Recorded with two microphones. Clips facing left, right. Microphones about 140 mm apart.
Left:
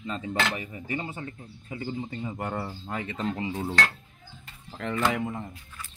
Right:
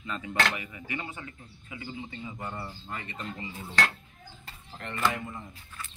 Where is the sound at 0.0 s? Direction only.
30° left (ahead or behind).